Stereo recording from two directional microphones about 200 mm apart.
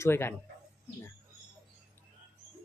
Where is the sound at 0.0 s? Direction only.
10° left (ahead or behind).